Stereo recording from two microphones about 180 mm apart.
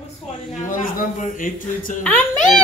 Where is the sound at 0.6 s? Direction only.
45° left (ahead or behind).